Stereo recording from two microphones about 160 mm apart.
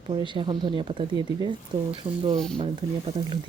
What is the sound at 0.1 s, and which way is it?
Speech, 30° right (ahead or behind).